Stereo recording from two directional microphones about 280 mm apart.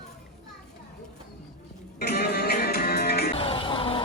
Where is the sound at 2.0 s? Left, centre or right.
Left.